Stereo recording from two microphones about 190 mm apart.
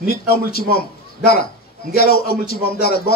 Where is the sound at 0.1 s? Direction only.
55° left (ahead or behind).